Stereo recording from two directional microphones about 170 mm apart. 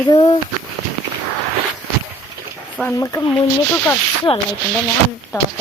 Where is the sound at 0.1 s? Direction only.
25° left (ahead or behind).